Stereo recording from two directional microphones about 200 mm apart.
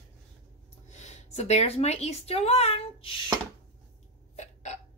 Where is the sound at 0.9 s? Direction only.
35° left (ahead or behind).